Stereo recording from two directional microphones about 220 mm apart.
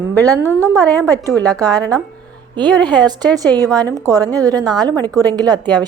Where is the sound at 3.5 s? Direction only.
15° right (ahead or behind).